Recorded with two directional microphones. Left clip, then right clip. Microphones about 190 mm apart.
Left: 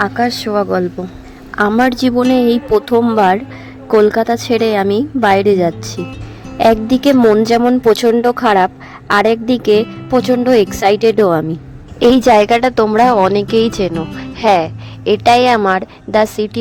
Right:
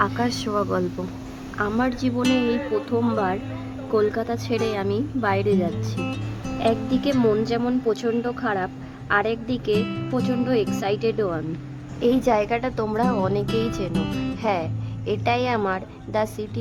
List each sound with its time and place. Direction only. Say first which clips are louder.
0.0 s speech: left 8 dB; 30° left (ahead or behind)
1.5 s a woman's voice: left 12 dB; 45° left (ahead or behind)
2.2 s speech: left 8 dB; centre (ahead or behind)
2.5 s a woman's voice: left 12 dB; 45° left (ahead or behind)
6.0 s music: left 4 dB; centre (ahead or behind)
6.6 s a woman's voice: left 12 dB; 50° left (ahead or behind)
13.9 s speech: left 5 dB; centre (ahead or behind)
14.4 s a woman's voice: left 15 dB; 45° left (ahead or behind)